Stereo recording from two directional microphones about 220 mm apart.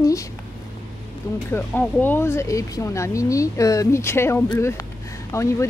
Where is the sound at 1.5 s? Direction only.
10° left (ahead or behind).